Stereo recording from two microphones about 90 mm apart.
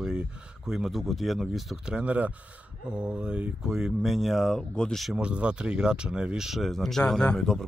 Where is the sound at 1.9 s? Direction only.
15° right (ahead or behind); by 5.0 s 10° left (ahead or behind).